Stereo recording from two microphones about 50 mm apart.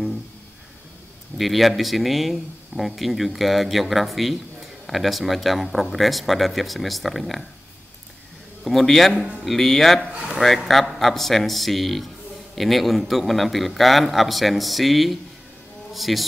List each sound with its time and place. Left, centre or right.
1.4 s speech: centre
8.6 s speech: centre